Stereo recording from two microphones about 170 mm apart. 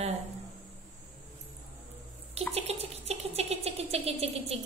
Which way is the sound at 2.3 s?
40° right (ahead or behind).